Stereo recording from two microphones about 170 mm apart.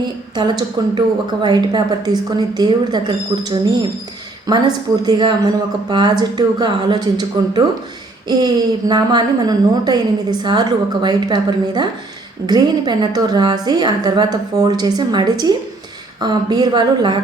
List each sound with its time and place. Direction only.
0.0 s a woman's voice: 25° right (ahead or behind)